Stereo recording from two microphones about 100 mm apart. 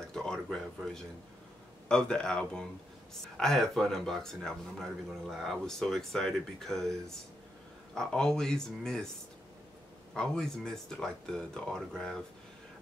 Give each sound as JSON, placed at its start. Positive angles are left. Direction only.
{"t": 0.1, "sound": "a sound", "side_deg": 5}
{"t": 0.7, "sound": "a man's voice", "side_deg": 5}
{"t": 7.9, "sound": "speech", "side_deg": 5}
{"t": 10.1, "sound": "speech", "side_deg": 5}